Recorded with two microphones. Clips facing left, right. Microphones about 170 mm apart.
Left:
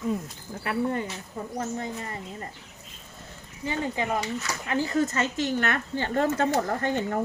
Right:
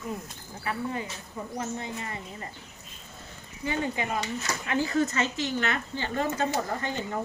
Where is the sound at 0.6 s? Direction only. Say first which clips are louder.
Left 5 dB; 60° left (ahead or behind).